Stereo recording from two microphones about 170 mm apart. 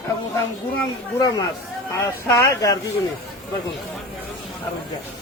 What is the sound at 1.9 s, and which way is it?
Speech, 15° left (ahead or behind).